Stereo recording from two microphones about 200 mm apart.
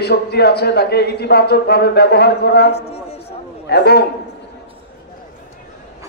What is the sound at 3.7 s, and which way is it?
Speech, 55° left (ahead or behind).